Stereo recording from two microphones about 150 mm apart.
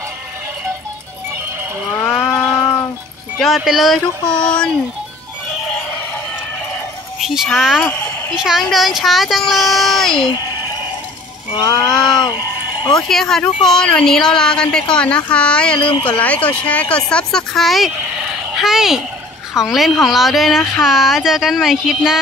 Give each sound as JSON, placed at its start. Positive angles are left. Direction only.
{"t": 3.3, "sound": "speech", "side_deg": 0}
{"t": 7.2, "sound": "speech", "side_deg": 0}
{"t": 7.8, "sound": "speech", "side_deg": 10}
{"t": 8.4, "sound": "speech", "side_deg": 0}
{"t": 11.5, "sound": "a sound", "side_deg": 30}
{"t": 13.1, "sound": "speech", "side_deg": 5}
{"t": 15.8, "sound": "speech", "side_deg": 35}
{"t": 16.1, "sound": "a woman's voice", "side_deg": 10}